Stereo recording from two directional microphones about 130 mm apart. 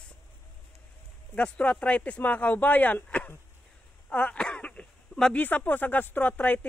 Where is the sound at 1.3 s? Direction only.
10° left (ahead or behind).